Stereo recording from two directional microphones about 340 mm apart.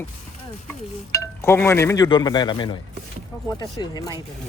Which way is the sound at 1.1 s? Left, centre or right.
Centre.